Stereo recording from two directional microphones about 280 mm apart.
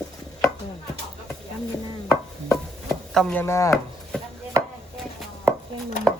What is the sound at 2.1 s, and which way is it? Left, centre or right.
Chopping, centre.